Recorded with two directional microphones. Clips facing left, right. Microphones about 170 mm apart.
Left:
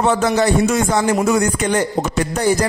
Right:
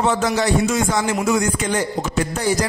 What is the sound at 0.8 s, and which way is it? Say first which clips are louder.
Speech: left 3 dB; 45° left (ahead or behind).